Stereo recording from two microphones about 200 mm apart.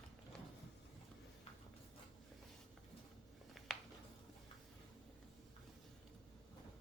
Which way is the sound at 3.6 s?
Centre (ahead or behind).